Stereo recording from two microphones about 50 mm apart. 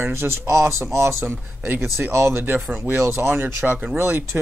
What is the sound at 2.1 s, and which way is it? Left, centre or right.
Speech, right.